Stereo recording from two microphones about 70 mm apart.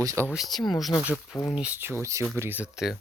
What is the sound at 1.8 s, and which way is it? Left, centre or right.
Speech, right.